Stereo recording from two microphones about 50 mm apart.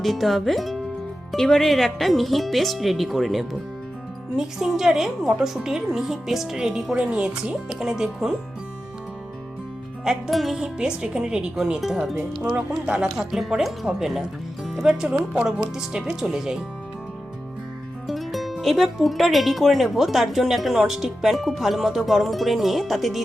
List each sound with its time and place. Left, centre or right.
0.0 s speech: centre
6.9 s speech: right
10.0 s speech: centre
10.6 s speech: centre
12.4 s speech: right
13.1 s speech: centre
18.0 s speech: centre